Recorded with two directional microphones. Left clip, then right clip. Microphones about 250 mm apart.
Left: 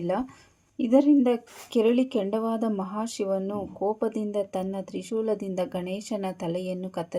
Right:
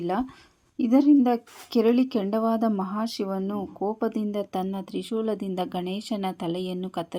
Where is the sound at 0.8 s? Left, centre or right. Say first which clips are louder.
Right 1 dB; right.